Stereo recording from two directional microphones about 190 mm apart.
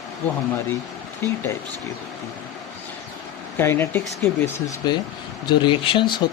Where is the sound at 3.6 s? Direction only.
15° left (ahead or behind).